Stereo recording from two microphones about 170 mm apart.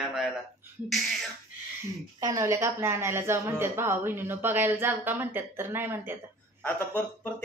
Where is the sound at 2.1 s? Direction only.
20° right (ahead or behind).